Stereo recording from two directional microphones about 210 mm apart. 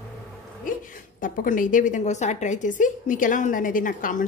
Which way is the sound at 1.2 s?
40° left (ahead or behind).